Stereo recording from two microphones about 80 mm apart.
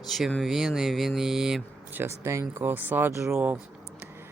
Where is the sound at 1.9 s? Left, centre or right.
Right.